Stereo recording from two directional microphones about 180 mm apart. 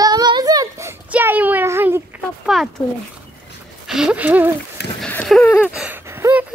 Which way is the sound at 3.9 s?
5° right (ahead or behind).